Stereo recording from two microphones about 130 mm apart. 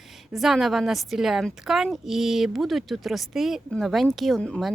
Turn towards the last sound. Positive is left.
turn(degrees=5)  # may be behind; listen again after turning